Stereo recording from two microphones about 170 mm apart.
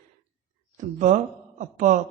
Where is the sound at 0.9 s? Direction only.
45° right (ahead or behind).